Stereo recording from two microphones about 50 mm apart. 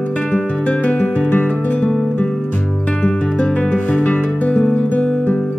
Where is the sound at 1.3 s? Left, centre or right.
Left.